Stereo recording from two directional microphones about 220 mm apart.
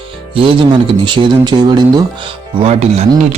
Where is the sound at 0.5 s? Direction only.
20° right (ahead or behind).